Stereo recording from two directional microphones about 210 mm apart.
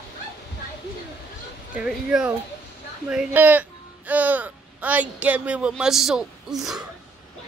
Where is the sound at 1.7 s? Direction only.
5° right (ahead or behind).